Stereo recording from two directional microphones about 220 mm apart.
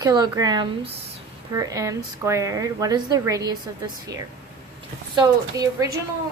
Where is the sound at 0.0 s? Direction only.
15° right (ahead or behind).